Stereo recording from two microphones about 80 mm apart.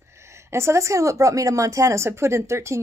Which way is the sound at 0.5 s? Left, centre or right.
Right.